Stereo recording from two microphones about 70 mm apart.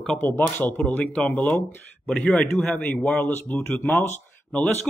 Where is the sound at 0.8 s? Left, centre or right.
Centre.